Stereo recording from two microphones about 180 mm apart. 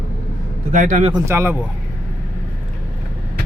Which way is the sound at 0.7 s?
45° right (ahead or behind).